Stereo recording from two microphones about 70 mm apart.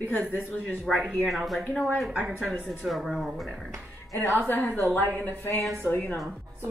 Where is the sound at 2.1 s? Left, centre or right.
Right.